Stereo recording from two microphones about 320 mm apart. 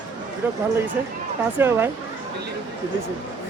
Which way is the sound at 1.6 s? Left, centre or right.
Centre.